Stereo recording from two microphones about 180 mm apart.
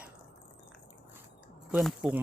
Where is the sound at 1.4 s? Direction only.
5° right (ahead or behind).